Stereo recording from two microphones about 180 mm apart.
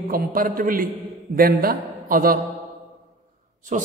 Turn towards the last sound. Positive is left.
turn(degrees=-45)  # may be behind; listen again after turning